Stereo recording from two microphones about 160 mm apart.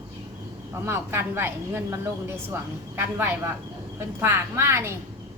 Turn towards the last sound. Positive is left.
turn(degrees=-15)  # may be behind; listen again after turning